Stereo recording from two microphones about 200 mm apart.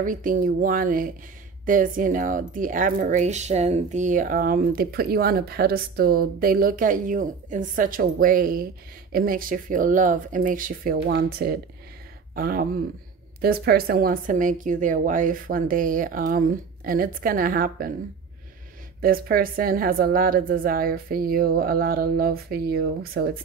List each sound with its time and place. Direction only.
0.0 s speech: 40° right (ahead or behind)
18.9 s speech: 45° right (ahead or behind)